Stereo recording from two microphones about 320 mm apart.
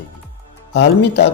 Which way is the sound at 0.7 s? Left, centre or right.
Left.